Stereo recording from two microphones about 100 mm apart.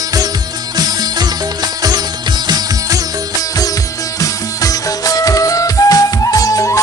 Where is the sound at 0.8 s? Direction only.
40° right (ahead or behind).